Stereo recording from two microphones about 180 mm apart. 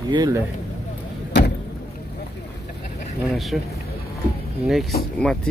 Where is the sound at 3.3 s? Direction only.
Centre (ahead or behind).